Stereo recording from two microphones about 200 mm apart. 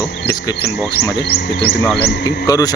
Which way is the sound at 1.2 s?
55° left (ahead or behind).